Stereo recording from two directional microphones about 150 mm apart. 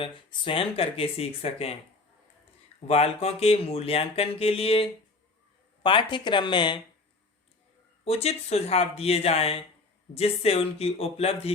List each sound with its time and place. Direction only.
0.0 s speech: 35° left (ahead or behind)
2.8 s speech: 45° left (ahead or behind)
8.0 s speech: 40° left (ahead or behind)